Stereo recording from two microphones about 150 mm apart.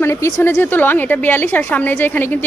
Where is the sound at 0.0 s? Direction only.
15° left (ahead or behind).